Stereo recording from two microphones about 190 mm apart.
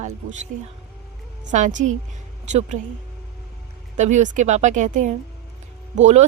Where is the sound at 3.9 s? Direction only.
40° right (ahead or behind).